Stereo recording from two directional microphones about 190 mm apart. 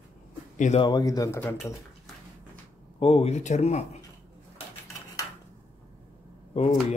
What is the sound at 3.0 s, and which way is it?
Speech, 30° left (ahead or behind).